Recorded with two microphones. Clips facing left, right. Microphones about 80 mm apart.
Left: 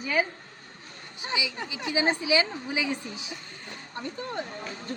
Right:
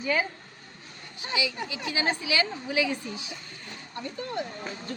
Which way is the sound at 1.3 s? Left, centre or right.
Left.